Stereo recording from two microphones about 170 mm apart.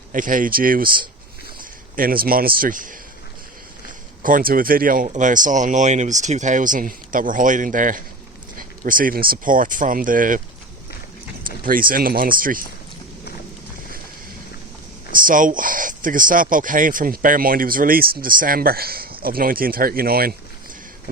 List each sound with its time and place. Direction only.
0.1 s speech: 50° right (ahead or behind)
4.2 s speech: 55° right (ahead or behind)
11.4 s speech: 55° right (ahead or behind)
15.1 s speech: 55° right (ahead or behind)